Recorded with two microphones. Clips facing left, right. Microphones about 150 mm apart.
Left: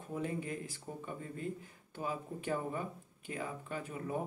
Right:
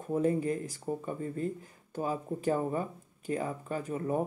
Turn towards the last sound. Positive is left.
turn(degrees=-40)  # may be behind; listen again after turning